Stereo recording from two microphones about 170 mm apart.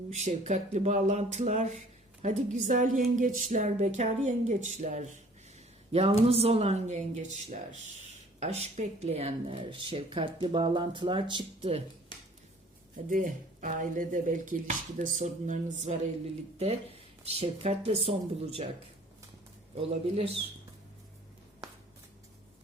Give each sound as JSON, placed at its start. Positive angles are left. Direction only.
{"t": 0.1, "sound": "speech", "side_deg": -40}
{"t": 13.1, "sound": "speech", "side_deg": -55}
{"t": 19.7, "sound": "speech", "side_deg": -35}